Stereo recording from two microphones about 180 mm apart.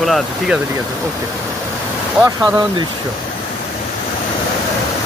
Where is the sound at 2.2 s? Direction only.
20° right (ahead or behind).